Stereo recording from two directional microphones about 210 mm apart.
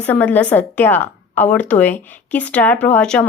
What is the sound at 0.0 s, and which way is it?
A woman's voice, 5° left (ahead or behind).